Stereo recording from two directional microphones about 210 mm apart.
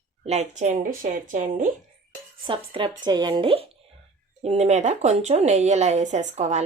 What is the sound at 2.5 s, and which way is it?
A woman's voice, 25° right (ahead or behind).